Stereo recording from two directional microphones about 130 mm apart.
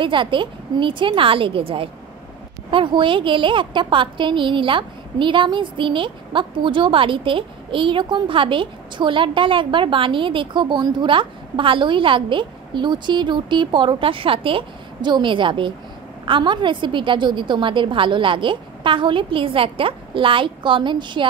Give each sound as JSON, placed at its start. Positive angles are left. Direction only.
{"t": 0.0, "sound": "a woman's voice", "side_deg": -40}